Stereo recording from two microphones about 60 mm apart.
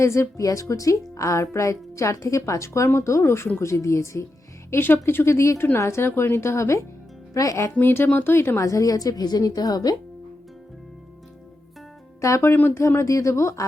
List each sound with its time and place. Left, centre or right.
0.0 s a woman's voice: left
4.7 s speech: left
7.3 s speech: left
7.8 s a woman's voice: left
12.5 s speech: left
12.8 s a woman's voice: left